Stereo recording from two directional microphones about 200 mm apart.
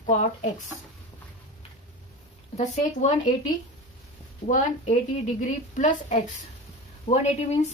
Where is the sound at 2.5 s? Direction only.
35° left (ahead or behind).